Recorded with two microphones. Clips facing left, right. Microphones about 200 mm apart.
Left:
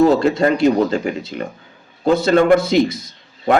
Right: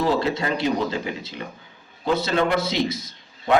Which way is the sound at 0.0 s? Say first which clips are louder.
Left 9 dB; 50° left (ahead or behind).